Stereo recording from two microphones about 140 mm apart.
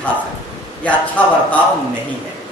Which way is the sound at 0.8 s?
10° left (ahead or behind).